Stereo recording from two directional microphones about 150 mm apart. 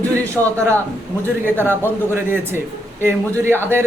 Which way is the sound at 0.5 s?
20° right (ahead or behind).